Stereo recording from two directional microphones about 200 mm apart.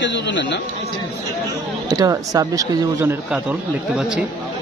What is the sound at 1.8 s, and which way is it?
Speech, 20° right (ahead or behind).